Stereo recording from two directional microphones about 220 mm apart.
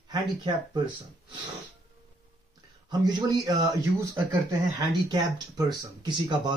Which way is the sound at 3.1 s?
20° right (ahead or behind).